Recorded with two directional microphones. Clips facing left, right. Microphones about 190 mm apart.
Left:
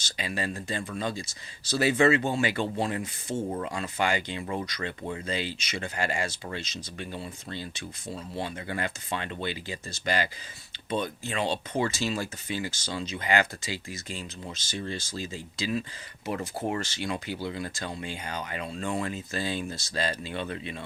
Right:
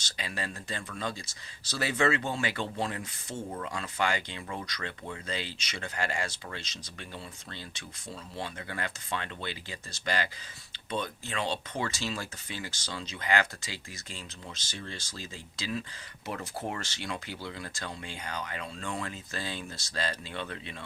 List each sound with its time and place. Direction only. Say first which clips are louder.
0.2 s speech: left 5 dB; 10° left (ahead or behind)
16.6 s speech: left 5 dB; 15° left (ahead or behind)